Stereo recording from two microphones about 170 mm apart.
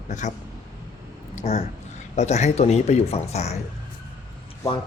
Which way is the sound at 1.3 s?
40° left (ahead or behind).